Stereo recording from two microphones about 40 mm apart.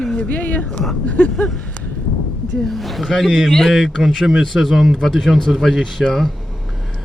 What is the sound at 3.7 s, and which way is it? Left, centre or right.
A man's voice, centre.